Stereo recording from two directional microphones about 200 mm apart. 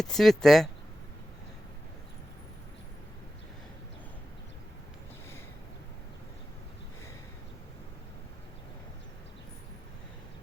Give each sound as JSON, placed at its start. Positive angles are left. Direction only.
{"t": 0.0, "sound": "speech", "side_deg": 0}